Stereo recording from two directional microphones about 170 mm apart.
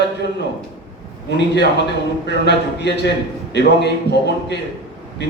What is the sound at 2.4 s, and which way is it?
A man's voice, 80° left.